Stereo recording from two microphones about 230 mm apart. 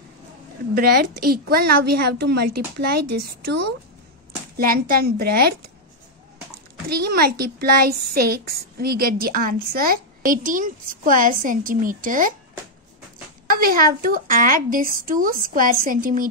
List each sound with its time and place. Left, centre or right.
0.7 s a child's voice: right
6.9 s a child's voice: right
13.6 s a child's voice: right